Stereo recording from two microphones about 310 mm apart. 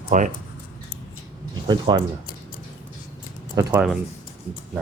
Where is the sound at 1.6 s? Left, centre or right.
Centre.